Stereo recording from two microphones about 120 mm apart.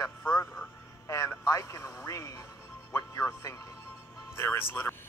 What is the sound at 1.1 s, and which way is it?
Speech, 25° left (ahead or behind).